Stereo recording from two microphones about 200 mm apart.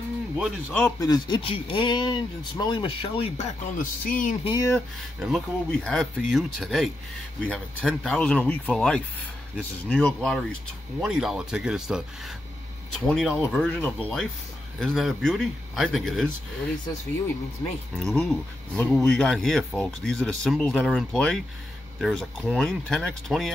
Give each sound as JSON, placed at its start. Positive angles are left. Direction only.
{"t": 0.4, "sound": "speech", "side_deg": 10}
{"t": 3.7, "sound": "speech", "side_deg": 45}
{"t": 4.5, "sound": "speech", "side_deg": 15}
{"t": 5.2, "sound": "speech", "side_deg": 0}
{"t": 17.9, "sound": "speech", "side_deg": 0}